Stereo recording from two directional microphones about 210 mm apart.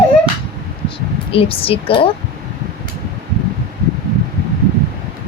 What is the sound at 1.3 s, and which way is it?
Speech, 25° left (ahead or behind).